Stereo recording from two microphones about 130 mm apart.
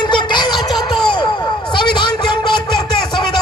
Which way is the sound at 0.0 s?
35° left (ahead or behind).